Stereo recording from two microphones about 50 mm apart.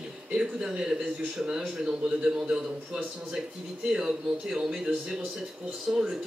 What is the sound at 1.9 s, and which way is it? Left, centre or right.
Speech, centre.